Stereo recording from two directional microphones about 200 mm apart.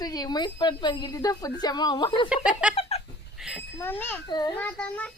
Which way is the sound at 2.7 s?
30° left (ahead or behind).